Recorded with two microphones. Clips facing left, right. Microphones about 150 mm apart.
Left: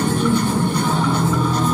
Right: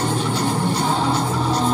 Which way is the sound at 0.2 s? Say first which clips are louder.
Left 3 dB; 55° left (ahead or behind).